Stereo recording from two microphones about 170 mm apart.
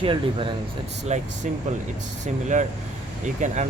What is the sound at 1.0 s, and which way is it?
Speech, 45° right (ahead or behind).